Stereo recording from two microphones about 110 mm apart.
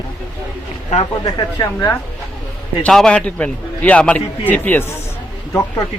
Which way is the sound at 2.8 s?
10° left (ahead or behind).